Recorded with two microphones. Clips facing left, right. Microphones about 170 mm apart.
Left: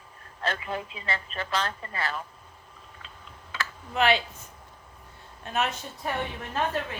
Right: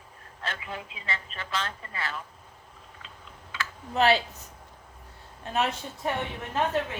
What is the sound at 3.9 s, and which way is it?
Speech, 35° right (ahead or behind).